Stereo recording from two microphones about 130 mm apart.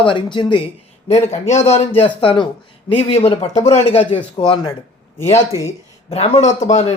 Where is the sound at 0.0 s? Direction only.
40° left (ahead or behind).